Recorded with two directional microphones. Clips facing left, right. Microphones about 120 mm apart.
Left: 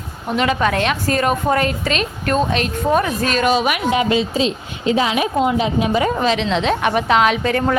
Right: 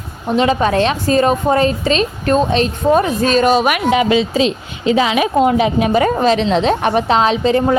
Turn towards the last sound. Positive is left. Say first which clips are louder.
# right 3 dB
turn(degrees=-25)  # may be behind; listen again after turning